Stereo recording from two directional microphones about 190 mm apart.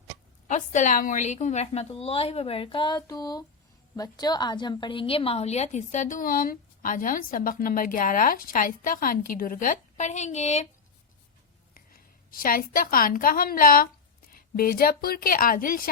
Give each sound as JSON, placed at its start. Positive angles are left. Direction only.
{"t": 0.4, "sound": "a woman's voice", "side_deg": 40}
{"t": 11.7, "sound": "a woman's voice", "side_deg": 50}